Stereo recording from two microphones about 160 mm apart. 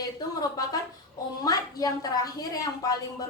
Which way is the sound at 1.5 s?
25° left (ahead or behind).